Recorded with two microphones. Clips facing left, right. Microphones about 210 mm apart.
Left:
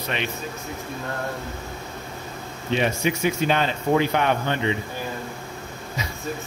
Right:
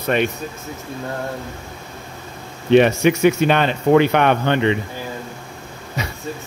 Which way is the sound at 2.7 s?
70° right (ahead or behind).